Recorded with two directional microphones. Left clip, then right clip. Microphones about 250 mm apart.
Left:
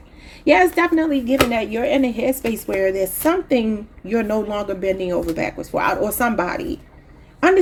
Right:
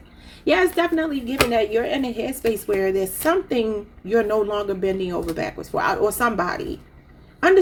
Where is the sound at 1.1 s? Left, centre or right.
Left.